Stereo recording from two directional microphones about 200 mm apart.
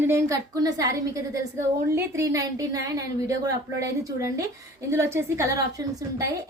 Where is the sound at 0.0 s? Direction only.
15° right (ahead or behind).